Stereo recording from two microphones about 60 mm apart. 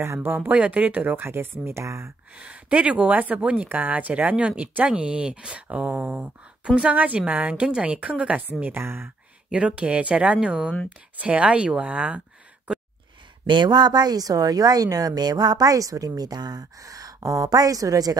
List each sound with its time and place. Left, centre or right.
0.0 s speech: right
0.5 s speech: right
2.3 s speech: right
9.5 s speech: right
14.1 s a woman's voice: right